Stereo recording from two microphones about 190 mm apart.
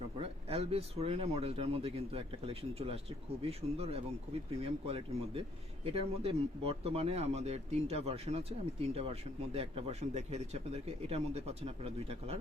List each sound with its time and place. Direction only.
0.2 s speech: 30° right (ahead or behind)